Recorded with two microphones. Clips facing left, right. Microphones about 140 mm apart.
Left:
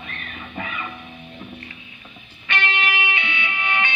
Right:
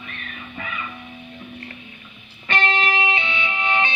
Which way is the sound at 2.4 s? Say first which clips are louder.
Right 3 dB; 40° right (ahead or behind).